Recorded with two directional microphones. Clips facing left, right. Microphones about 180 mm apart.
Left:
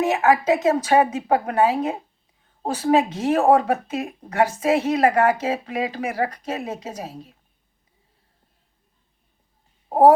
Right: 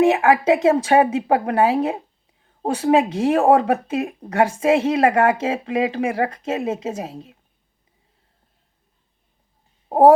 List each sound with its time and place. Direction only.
0.0 s speech: 25° right (ahead or behind)